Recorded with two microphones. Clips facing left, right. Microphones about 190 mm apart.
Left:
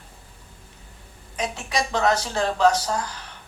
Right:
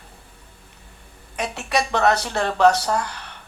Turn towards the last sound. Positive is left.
turn(degrees=-65)  # may be behind; listen again after turning